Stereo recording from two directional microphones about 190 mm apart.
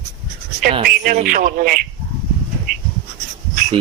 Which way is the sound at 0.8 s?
45° right (ahead or behind).